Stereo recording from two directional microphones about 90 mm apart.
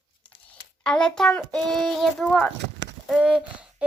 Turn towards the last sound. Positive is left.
turn(degrees=-10)  # may be behind; listen again after turning